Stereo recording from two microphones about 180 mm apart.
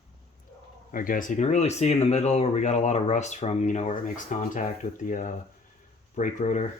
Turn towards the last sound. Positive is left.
turn(degrees=45)  # may be behind; listen again after turning